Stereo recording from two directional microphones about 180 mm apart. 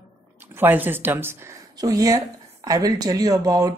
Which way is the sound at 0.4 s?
10° right (ahead or behind).